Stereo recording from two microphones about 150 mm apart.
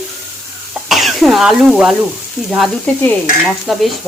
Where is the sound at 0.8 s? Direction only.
Centre (ahead or behind).